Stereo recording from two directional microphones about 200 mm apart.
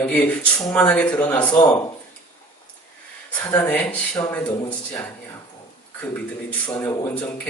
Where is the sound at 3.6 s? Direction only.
10° left (ahead or behind).